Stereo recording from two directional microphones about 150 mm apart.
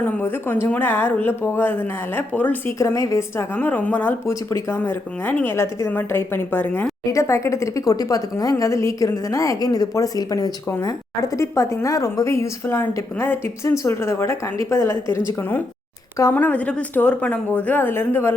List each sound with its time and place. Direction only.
0.0 s a woman's voice: 15° left (ahead or behind)